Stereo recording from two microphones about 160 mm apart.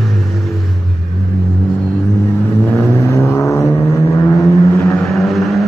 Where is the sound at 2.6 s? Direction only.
20° left (ahead or behind).